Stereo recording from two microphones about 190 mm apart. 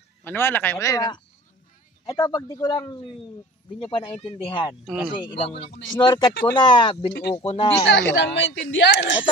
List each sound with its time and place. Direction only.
0.2 s speech: 10° left (ahead or behind); by 7.8 s 25° left (ahead or behind)
7.9 s a woman's voice: 70° left (ahead or behind)